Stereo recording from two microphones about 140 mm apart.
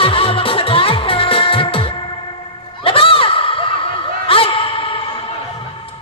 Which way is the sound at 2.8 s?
40° left (ahead or behind).